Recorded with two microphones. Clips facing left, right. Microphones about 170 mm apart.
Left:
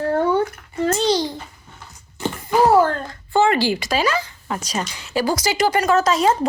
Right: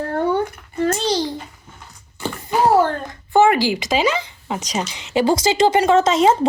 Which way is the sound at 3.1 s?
15° right (ahead or behind).